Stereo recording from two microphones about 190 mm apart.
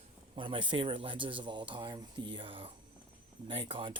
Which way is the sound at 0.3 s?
25° right (ahead or behind).